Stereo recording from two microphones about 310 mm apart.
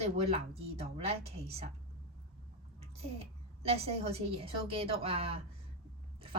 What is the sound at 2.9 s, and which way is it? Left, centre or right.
Speech, centre.